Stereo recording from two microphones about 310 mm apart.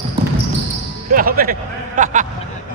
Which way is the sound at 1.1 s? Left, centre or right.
Right.